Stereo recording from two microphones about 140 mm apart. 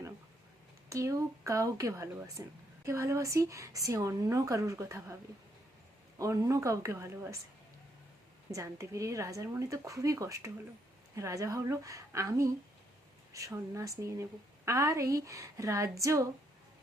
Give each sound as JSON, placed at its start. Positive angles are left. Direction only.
{"t": 0.9, "sound": "a woman's voice", "side_deg": -20}
{"t": 6.1, "sound": "a woman's voice", "side_deg": -25}
{"t": 8.4, "sound": "a woman's voice", "side_deg": -20}